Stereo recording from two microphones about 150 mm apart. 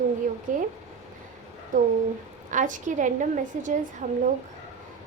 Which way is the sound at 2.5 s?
60° right (ahead or behind).